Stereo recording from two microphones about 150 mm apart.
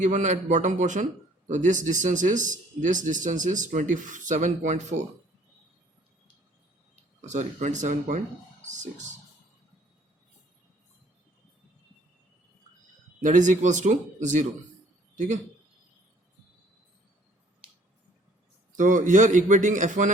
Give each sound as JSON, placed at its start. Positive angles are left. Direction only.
{"t": 0.0, "sound": "speech", "side_deg": -55}
{"t": 7.2, "sound": "speech", "side_deg": -50}
{"t": 13.2, "sound": "speech", "side_deg": -55}
{"t": 15.1, "sound": "a sound", "side_deg": -55}
{"t": 18.8, "sound": "speech", "side_deg": -60}